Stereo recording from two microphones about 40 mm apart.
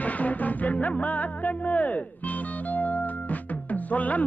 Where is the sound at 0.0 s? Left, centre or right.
Left.